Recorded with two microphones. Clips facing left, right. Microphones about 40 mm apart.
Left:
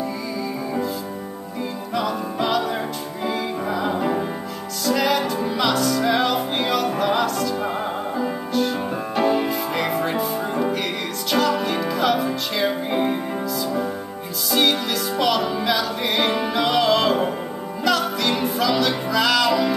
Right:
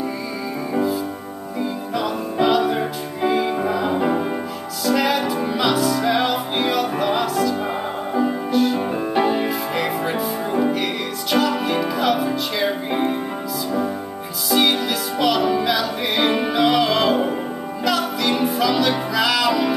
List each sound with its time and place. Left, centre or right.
2.0 s music: centre
9.5 s music: centre
14.5 s music: centre